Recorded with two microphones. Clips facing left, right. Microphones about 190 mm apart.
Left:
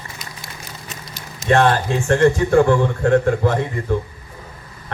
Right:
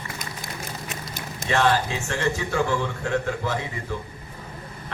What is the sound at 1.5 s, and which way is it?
A man's voice, 55° left (ahead or behind).